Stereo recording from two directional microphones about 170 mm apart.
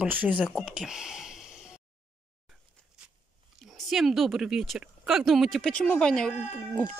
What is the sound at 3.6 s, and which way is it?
Speech, centre (ahead or behind).